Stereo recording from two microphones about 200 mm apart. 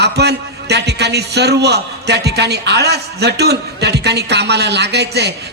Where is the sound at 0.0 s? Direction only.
55° right (ahead or behind).